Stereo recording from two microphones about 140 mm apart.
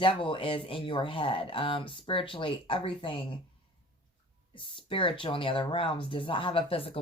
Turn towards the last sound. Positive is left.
turn(degrees=40)  # may be behind; listen again after turning